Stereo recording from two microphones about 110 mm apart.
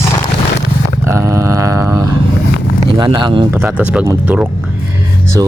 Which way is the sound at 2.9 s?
40° right (ahead or behind).